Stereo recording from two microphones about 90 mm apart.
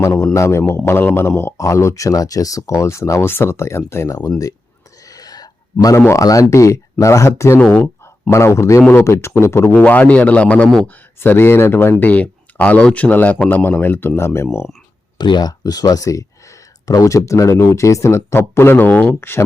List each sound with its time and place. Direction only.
0.3 s speech: 30° left (ahead or behind)
5.0 s a sound: 45° left (ahead or behind)
6.1 s speech: 40° left (ahead or behind)
7.7 s a sound: 30° left (ahead or behind)
8.3 s speech: 30° left (ahead or behind)
15.2 s speech: 55° left (ahead or behind); by 19.5 s 25° left (ahead or behind)